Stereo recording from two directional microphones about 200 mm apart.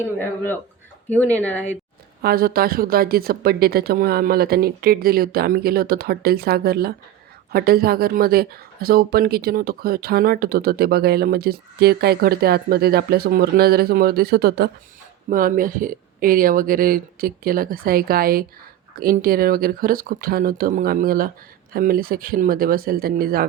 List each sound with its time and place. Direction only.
0.0 s speech: 10° left (ahead or behind)
2.2 s speech: 50° right (ahead or behind)